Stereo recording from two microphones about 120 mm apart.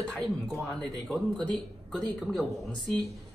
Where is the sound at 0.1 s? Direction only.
Centre (ahead or behind).